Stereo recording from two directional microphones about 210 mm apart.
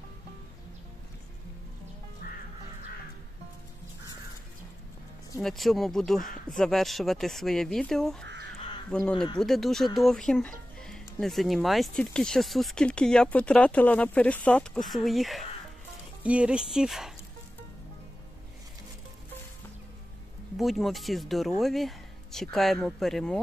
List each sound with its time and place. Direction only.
2.2 s music: 45° left (ahead or behind)
5.4 s speech: centre (ahead or behind)
20.5 s speech: centre (ahead or behind)